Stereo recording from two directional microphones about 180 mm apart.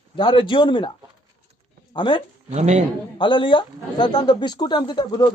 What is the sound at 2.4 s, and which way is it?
Speech, 40° right (ahead or behind).